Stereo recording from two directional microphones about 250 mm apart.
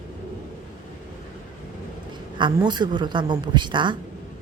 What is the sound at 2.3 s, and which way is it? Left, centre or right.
A woman's voice, centre.